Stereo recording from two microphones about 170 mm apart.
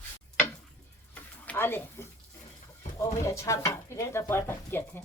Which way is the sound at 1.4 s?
10° left (ahead or behind).